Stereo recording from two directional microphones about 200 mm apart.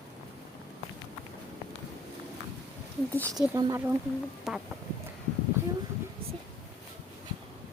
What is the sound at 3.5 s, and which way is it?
Speech, 15° right (ahead or behind).